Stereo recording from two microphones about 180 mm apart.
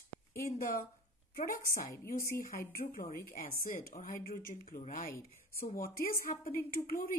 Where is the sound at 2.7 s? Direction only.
55° left (ahead or behind).